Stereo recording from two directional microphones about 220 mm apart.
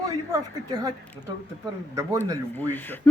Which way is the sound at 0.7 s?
20° right (ahead or behind).